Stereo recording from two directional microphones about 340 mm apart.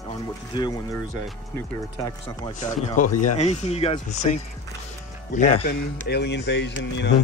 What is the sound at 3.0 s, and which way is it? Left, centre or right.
Speech, left.